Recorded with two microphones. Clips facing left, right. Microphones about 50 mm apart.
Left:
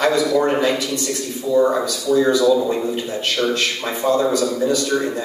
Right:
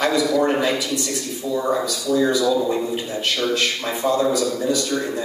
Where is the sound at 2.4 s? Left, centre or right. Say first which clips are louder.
Left 4 dB; centre.